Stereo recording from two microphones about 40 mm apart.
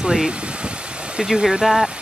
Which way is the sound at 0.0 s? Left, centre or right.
Right.